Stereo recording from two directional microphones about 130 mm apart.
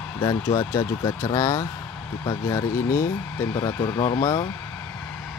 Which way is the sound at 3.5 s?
30° left (ahead or behind).